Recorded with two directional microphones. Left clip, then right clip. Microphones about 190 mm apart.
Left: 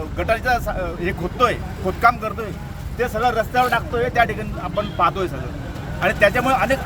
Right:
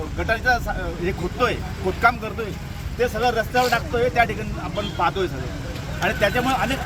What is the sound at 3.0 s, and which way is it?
Speech, 15° left (ahead or behind).